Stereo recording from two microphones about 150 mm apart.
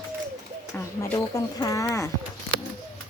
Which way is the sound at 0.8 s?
20° left (ahead or behind).